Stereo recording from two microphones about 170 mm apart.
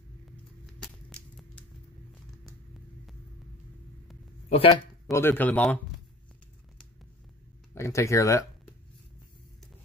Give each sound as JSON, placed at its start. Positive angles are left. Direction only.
{"t": 0.9, "sound": "a sound", "side_deg": 5}
{"t": 4.5, "sound": "speech", "side_deg": 35}
{"t": 5.1, "sound": "speech", "side_deg": 10}
{"t": 7.7, "sound": "speech", "side_deg": 15}